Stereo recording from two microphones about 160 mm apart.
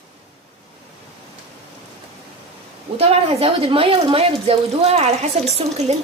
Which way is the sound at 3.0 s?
35° right (ahead or behind).